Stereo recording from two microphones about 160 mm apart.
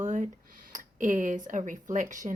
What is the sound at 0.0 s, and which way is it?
Speech, 50° right (ahead or behind).